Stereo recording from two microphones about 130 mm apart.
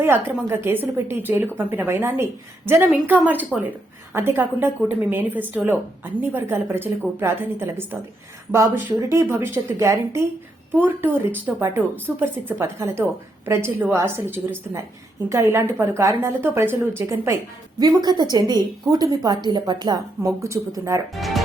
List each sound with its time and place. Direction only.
0.0 s a woman's voice: 15° right (ahead or behind)
17.7 s a woman's voice: 35° right (ahead or behind)
21.2 s speech: centre (ahead or behind)